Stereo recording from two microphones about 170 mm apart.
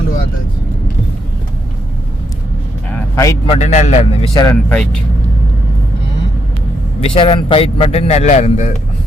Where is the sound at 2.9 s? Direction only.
15° left (ahead or behind).